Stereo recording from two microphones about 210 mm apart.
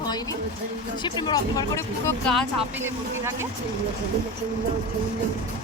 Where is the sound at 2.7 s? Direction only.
10° right (ahead or behind).